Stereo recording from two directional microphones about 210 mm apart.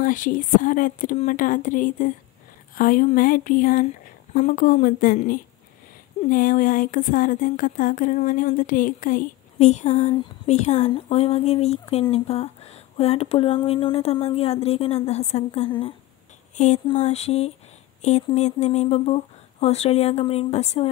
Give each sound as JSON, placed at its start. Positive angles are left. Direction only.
{"t": 0.0, "sound": "speech", "side_deg": 40}